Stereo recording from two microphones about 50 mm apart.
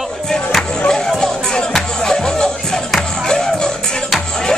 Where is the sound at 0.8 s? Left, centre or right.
Centre.